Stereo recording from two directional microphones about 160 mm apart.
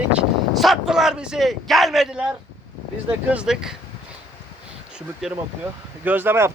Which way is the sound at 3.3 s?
5° right (ahead or behind).